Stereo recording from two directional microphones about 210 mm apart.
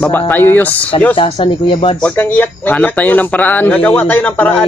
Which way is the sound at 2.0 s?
10° left (ahead or behind).